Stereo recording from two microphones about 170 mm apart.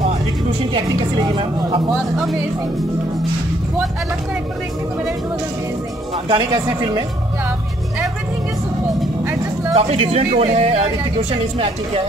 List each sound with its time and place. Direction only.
0.7 s speech: 30° right (ahead or behind)
6.2 s speech: 25° right (ahead or behind)
9.2 s vehicle: 20° right (ahead or behind)
9.8 s speech: 35° right (ahead or behind)